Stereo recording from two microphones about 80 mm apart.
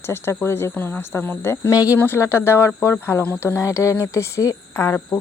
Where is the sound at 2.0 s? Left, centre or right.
Left.